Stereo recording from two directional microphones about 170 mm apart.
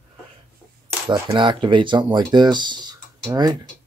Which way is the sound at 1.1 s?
30° right (ahead or behind).